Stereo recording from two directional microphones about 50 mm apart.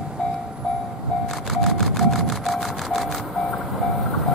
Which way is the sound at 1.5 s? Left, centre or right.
Centre.